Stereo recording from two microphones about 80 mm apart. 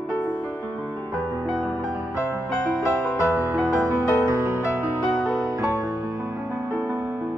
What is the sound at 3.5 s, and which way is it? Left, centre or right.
Music, right.